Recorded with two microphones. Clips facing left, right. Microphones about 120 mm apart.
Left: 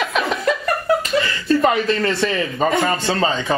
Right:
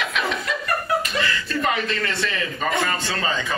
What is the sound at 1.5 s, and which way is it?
Speech, 35° left (ahead or behind).